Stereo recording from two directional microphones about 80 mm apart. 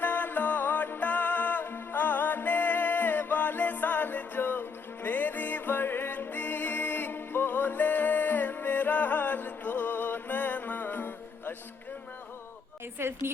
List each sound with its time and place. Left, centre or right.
0.0 s music: left
13.0 s a woman's voice: right